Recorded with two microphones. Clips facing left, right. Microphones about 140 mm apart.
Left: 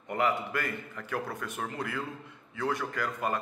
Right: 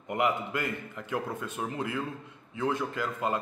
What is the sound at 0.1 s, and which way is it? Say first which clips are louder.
A man's voice: right 1 dB; 20° right (ahead or behind).